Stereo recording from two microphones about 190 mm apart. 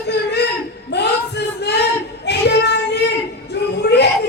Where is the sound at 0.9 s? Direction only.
65° left (ahead or behind).